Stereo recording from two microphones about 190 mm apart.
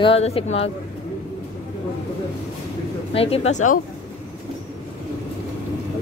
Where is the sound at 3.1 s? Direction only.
30° left (ahead or behind).